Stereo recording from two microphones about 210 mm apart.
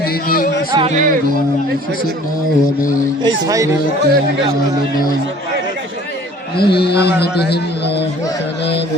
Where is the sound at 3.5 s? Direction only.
15° right (ahead or behind).